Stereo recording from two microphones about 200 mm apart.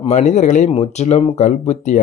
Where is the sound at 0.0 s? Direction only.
35° left (ahead or behind).